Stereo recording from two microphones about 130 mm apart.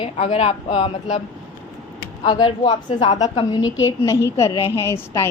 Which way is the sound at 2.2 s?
40° left (ahead or behind).